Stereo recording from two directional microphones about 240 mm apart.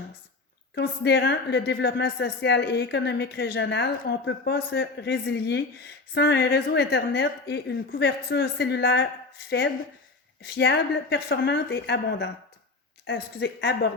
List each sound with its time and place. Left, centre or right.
0.8 s a woman's voice: left
10.4 s a woman's voice: left